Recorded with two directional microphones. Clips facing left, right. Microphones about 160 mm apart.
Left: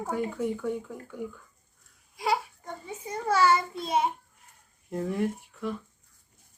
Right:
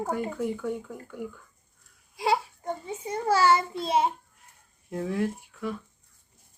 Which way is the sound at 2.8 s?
30° right (ahead or behind).